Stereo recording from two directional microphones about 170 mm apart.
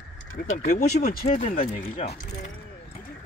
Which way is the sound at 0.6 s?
45° left (ahead or behind).